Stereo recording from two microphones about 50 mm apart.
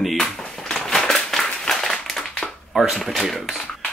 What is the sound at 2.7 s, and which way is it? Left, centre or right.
Speech, centre.